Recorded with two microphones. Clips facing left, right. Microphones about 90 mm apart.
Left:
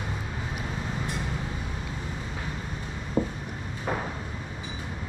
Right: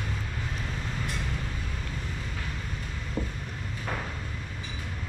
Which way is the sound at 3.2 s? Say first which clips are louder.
Left 7 dB; 30° left (ahead or behind).